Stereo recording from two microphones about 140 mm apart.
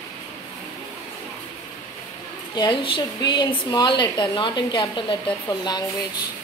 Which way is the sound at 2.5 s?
35° left (ahead or behind).